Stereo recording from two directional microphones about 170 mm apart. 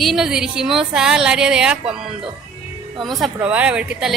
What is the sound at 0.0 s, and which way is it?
A woman's voice, centre (ahead or behind).